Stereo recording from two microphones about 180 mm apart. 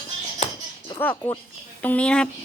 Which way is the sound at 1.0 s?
10° left (ahead or behind).